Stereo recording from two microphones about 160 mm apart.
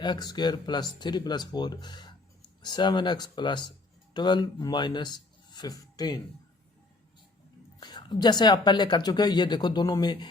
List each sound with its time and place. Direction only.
0.0 s speech: 25° left (ahead or behind)
7.8 s speech: 25° left (ahead or behind)